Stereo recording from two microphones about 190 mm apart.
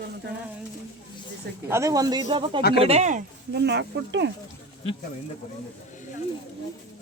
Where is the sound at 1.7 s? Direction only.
15° right (ahead or behind); by 3.2 s 40° right (ahead or behind).